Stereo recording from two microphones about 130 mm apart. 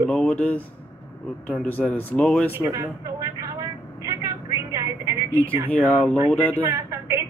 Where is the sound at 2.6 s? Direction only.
25° right (ahead or behind).